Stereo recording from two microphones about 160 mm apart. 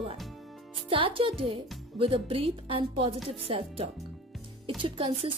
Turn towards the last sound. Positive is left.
turn(degrees=-35)  # may be behind; listen again after turning